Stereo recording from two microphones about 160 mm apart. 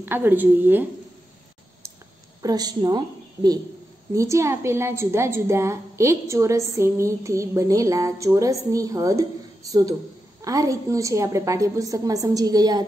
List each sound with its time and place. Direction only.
0.0 s a woman's voice: 10° right (ahead or behind)
2.4 s a woman's voice: 25° right (ahead or behind)
4.1 s a woman's voice: 20° right (ahead or behind)